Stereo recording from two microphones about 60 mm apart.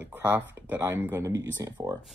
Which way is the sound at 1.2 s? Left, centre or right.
Right.